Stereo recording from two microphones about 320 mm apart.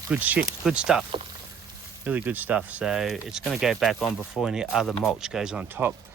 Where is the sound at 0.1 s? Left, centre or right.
Centre.